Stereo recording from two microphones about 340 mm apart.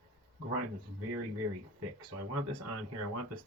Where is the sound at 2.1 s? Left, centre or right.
Right.